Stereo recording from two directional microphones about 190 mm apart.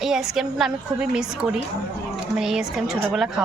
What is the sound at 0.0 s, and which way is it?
A woman's voice, centre (ahead or behind).